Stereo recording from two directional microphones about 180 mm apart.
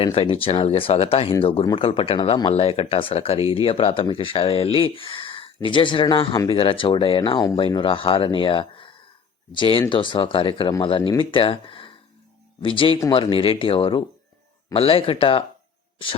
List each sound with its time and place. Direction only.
0.0 s speech: 30° left (ahead or behind)